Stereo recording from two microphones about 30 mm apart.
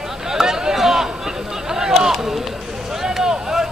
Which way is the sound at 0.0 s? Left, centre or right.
Centre.